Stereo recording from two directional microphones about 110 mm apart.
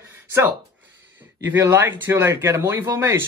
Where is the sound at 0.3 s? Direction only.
25° right (ahead or behind).